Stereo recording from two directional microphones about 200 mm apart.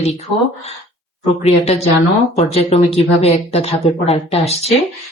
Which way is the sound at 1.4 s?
30° left (ahead or behind).